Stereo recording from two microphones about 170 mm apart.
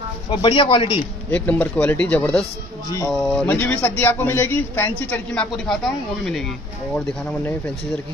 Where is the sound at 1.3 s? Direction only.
10° left (ahead or behind).